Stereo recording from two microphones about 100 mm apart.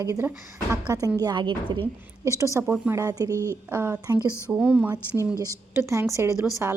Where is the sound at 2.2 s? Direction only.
30° right (ahead or behind).